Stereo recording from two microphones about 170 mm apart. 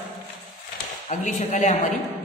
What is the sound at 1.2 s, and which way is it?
Speech, 45° left (ahead or behind).